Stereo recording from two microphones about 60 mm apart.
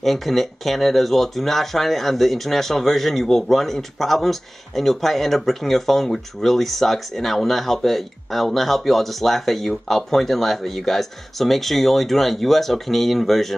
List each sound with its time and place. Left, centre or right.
0.0 s speech: centre